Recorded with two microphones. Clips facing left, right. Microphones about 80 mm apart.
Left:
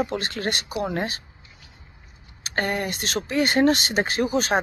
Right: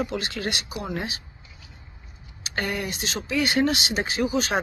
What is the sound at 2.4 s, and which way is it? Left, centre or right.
Speech, left.